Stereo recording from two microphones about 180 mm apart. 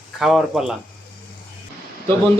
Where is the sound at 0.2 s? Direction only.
Centre (ahead or behind).